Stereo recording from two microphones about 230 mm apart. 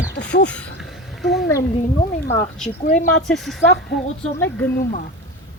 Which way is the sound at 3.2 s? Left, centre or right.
Centre.